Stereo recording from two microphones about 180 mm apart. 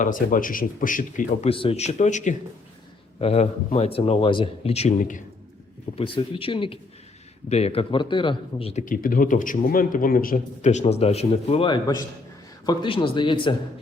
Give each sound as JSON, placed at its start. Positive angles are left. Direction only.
{"t": 0.0, "sound": "a man's voice", "side_deg": 50}
{"t": 1.5, "sound": "speech", "side_deg": 30}
{"t": 6.0, "sound": "speech", "side_deg": 30}
{"t": 8.8, "sound": "a man's voice", "side_deg": 50}